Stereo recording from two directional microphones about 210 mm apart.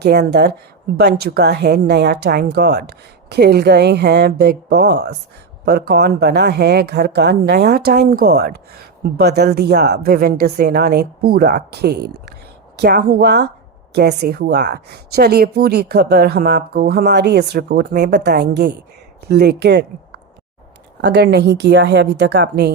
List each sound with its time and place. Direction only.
0.0 s a woman's voice: 50° right (ahead or behind)
21.0 s a woman's voice: 55° right (ahead or behind)